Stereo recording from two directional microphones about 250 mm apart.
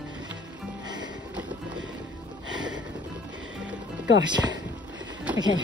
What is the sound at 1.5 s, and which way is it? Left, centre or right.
Boat, centre.